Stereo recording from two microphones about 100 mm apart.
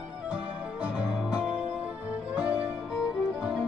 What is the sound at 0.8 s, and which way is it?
Music, 10° right (ahead or behind).